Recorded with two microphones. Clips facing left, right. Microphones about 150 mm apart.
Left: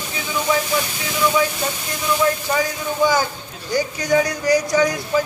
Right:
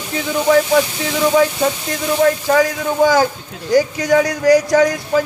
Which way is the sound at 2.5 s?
80° right.